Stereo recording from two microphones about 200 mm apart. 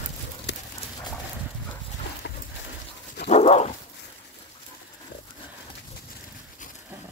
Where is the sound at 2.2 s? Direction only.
60° left (ahead or behind).